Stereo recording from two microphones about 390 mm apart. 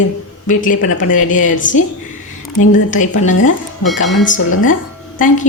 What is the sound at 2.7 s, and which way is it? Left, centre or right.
Speech, centre.